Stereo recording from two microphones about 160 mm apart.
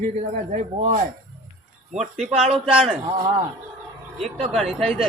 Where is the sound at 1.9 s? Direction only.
Centre (ahead or behind).